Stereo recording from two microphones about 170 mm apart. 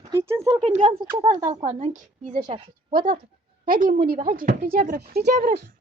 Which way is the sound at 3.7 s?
55° right (ahead or behind).